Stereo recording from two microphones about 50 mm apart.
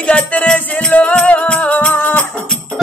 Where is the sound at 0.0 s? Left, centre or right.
Left.